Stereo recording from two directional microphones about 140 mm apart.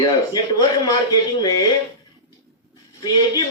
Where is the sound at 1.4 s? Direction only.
25° left (ahead or behind).